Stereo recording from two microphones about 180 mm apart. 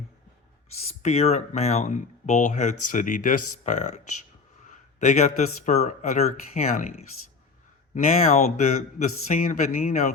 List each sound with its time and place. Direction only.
0.9 s speech: 35° left (ahead or behind)